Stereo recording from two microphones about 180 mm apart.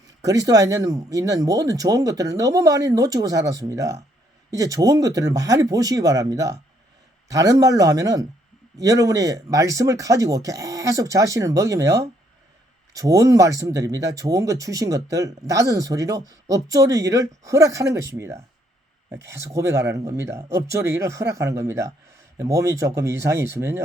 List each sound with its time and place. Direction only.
0.2 s speech: 20° right (ahead or behind)